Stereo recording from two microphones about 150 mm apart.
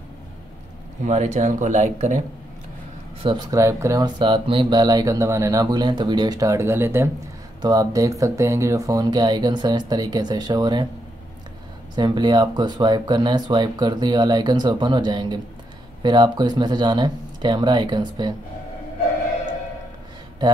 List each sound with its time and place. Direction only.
1.0 s speech: 50° right (ahead or behind)
3.2 s speech: 35° right (ahead or behind)
3.4 s speech: 20° right (ahead or behind)
11.9 s speech: 30° right (ahead or behind)